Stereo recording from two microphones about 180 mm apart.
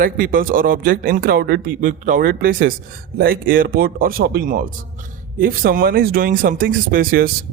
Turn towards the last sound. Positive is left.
turn(degrees=-50)  # may be behind; listen again after turning